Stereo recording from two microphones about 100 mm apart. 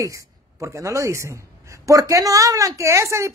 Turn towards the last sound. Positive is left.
turn(degrees=-30)  # may be behind; listen again after turning